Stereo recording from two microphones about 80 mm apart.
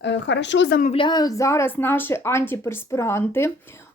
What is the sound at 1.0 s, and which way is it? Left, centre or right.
Speech, left.